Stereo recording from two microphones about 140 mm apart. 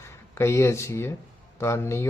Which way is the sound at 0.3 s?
20° left (ahead or behind).